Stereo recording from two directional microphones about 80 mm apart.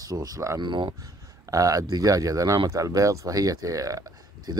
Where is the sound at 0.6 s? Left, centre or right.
Right.